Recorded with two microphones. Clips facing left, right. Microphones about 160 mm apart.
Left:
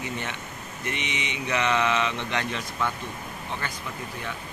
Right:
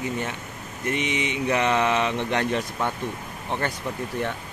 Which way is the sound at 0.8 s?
45° right (ahead or behind).